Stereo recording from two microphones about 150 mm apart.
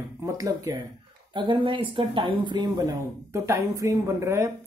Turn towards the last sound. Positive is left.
turn(degrees=-20)  # may be behind; listen again after turning